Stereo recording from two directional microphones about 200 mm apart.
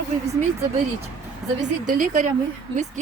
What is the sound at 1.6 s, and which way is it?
Speech, 35° right (ahead or behind).